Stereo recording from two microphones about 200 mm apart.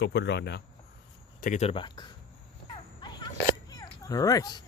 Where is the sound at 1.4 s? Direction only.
35° left (ahead or behind).